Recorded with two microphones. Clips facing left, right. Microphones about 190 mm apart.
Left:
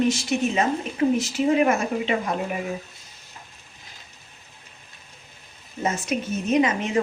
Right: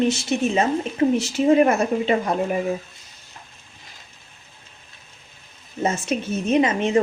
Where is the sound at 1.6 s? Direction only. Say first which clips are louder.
Right 3 dB; 35° right (ahead or behind).